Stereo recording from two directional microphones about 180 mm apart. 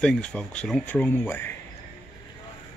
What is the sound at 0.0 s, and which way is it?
Speech, 5° left (ahead or behind).